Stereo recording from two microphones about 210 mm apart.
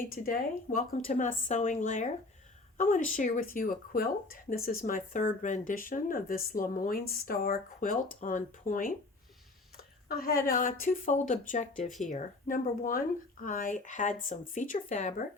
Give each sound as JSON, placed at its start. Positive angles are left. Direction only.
{"t": 0.0, "sound": "speech", "side_deg": 40}